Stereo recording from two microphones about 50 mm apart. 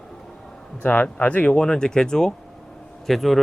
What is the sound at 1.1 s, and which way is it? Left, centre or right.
Speech, left.